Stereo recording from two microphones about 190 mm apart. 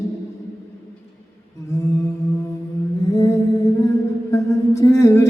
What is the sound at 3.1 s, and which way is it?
Mantra, 15° left (ahead or behind).